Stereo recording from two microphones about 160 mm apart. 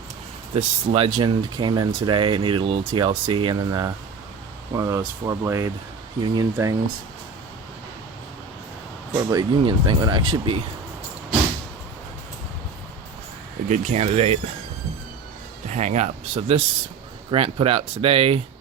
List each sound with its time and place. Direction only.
0.5 s speech: 35° right (ahead or behind); by 6.7 s 20° right (ahead or behind)
9.1 s speech: 25° right (ahead or behind)
13.7 s speech: 45° right (ahead or behind)
15.7 s speech: 45° right (ahead or behind)